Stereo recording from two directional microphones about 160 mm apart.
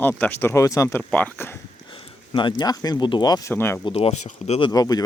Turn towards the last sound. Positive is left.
turn(degrees=25)  # may be behind; listen again after turning